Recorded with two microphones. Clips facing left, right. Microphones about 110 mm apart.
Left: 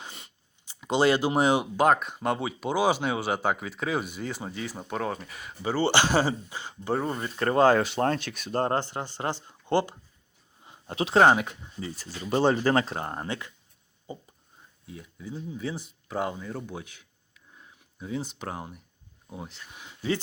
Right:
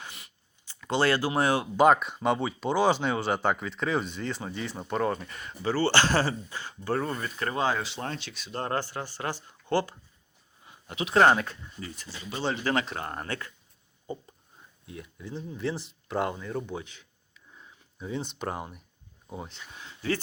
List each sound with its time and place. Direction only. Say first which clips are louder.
0.0 s a sound: left 1 dB; 25° left (ahead or behind)
0.7 s speech: left 3 dB; 15° left (ahead or behind)
1.7 s speech: right 2 dB; centre (ahead or behind)
5.7 s speech: left 1 dB; 15° left (ahead or behind)
7.3 s speech: left 9 dB; 45° left (ahead or behind)
8.6 s speech: left 1 dB; 25° left (ahead or behind)
10.6 s a sound: left 4 dB; 30° left (ahead or behind)
11.2 s speech: left 1 dB; 15° left (ahead or behind)
11.9 s speech: left 11 dB; 45° left (ahead or behind); by 13.5 s 20° left (ahead or behind)
14.8 s speech: left 1 dB; centre (ahead or behind)
17.5 s a sound: right 1 dB; centre (ahead or behind)
19.3 s speech: right 1 dB; centre (ahead or behind)